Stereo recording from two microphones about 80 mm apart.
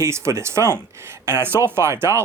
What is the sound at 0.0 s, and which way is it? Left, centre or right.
Speech, right.